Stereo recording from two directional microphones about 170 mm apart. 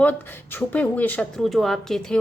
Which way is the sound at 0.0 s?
10° left (ahead or behind).